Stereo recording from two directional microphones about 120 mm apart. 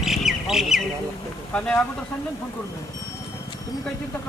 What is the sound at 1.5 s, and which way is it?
Speech, 10° left (ahead or behind).